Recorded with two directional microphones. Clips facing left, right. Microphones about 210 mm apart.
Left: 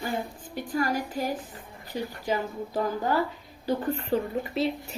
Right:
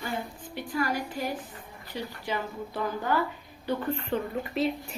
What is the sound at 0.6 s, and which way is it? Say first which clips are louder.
A woman's voice: left 2 dB; 45° left (ahead or behind).